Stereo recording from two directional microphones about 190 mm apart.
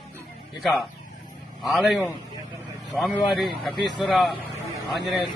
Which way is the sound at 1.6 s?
Centre (ahead or behind).